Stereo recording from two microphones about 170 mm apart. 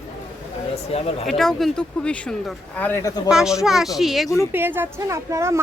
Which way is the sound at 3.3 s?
5° right (ahead or behind).